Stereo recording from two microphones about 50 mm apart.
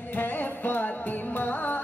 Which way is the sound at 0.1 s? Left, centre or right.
Left.